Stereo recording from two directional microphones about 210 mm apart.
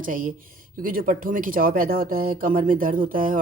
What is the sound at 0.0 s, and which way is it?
Speech, 40° right (ahead or behind).